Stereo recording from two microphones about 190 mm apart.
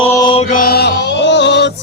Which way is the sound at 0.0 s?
25° left (ahead or behind).